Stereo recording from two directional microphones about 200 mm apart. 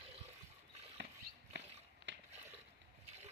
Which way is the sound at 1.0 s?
60° right (ahead or behind).